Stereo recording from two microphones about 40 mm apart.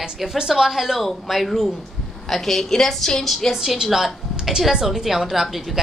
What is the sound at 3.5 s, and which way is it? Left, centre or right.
A woman's voice, centre.